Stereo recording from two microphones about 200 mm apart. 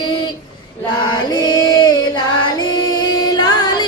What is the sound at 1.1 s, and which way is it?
Chant, 20° left (ahead or behind).